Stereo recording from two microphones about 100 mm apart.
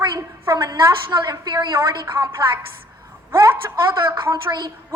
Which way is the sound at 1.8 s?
25° right (ahead or behind).